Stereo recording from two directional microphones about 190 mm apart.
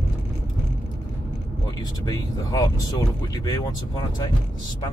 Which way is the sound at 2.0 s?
20° left (ahead or behind).